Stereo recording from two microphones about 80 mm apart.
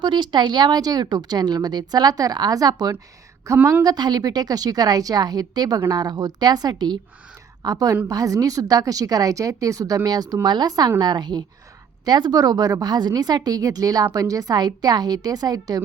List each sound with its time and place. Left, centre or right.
0.0 s a woman's voice: right
3.5 s a woman's voice: right
3.8 s a woman's voice: right
7.6 s a woman's voice: right